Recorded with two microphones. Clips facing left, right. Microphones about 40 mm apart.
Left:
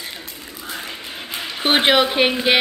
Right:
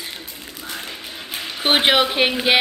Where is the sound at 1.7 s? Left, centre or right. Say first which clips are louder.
Left 1 dB; centre.